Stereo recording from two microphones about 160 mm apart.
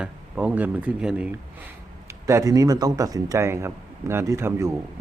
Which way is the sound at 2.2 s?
20° right (ahead or behind).